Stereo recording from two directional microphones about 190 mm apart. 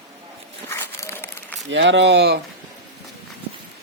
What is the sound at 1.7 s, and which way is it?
Speech, 70° right (ahead or behind).